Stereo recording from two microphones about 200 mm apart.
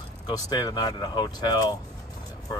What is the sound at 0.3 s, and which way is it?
Speech, 20° left (ahead or behind).